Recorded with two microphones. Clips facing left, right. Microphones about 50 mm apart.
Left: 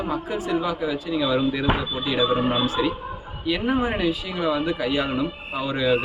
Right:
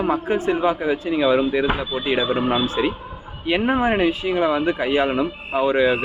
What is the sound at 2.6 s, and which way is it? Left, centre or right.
Speech, right.